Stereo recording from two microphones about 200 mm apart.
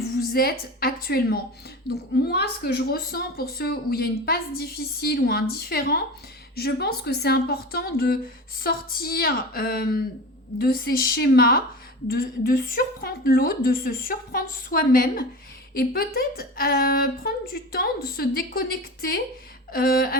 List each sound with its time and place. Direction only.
0.2 s a woman's voice: 50° left (ahead or behind)